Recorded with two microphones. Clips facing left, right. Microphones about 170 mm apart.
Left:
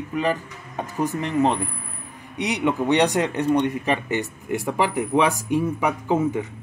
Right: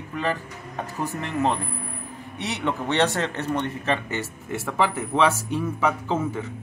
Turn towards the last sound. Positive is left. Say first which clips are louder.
# left 4 dB
turn(degrees=15)  # may be behind; listen again after turning